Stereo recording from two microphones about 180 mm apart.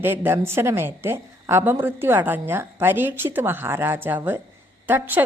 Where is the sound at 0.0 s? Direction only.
10° right (ahead or behind).